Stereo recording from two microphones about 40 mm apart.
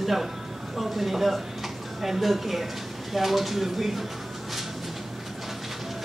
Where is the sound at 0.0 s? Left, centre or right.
Centre.